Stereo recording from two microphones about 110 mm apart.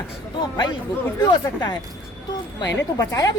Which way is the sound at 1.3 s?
45° left (ahead or behind).